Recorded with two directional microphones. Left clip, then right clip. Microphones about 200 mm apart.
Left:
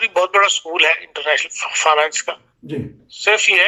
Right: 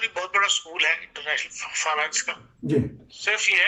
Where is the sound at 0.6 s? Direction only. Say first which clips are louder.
Left 8 dB; 50° left (ahead or behind).